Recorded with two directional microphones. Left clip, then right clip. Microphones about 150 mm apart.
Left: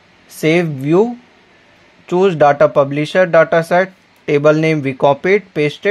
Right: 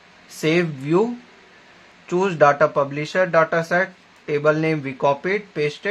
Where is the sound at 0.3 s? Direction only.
30° left (ahead or behind).